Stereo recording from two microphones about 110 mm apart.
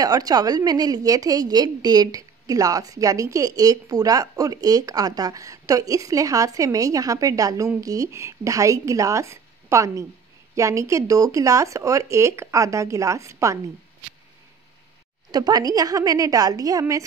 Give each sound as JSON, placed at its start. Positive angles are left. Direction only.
{"t": 0.0, "sound": "a woman's voice", "side_deg": -35}
{"t": 15.3, "sound": "a woman's voice", "side_deg": -35}